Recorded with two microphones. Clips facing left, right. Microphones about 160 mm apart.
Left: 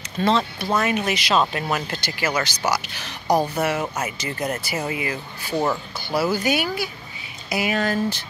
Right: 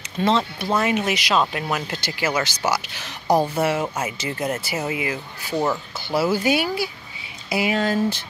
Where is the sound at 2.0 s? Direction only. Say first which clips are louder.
Right 1 dB; 25° right (ahead or behind).